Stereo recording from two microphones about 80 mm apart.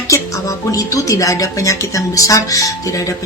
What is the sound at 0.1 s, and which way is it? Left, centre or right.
Speech, left.